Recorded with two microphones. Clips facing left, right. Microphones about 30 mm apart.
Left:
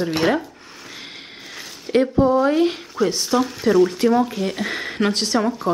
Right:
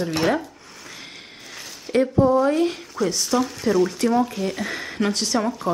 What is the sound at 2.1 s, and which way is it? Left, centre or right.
Speech, centre.